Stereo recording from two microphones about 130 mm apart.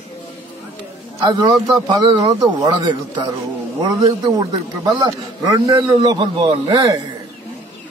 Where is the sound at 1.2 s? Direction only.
35° right (ahead or behind).